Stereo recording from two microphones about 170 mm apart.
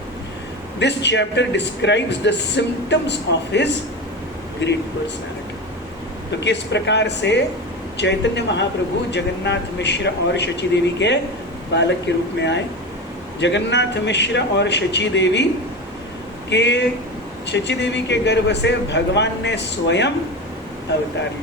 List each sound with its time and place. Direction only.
0.8 s speech: 90° left
6.4 s speech: 90° left
12.4 s speech: 90° left
16.5 s speech: 90° left